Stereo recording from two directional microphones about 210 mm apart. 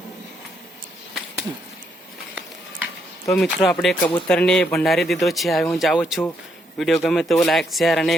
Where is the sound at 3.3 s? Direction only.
Centre (ahead or behind).